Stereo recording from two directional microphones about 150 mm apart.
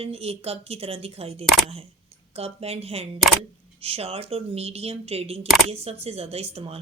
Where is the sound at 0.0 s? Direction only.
40° right (ahead or behind).